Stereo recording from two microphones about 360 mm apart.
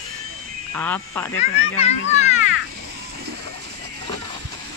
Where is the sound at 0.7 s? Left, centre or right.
Centre.